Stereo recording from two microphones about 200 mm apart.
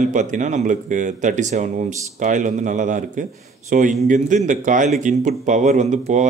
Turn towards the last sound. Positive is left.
turn(degrees=-35)  # may be behind; listen again after turning